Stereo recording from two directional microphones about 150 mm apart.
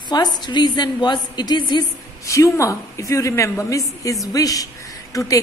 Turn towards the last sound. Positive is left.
turn(degrees=25)  # may be behind; listen again after turning